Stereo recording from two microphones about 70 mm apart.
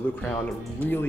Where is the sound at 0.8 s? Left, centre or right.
Left.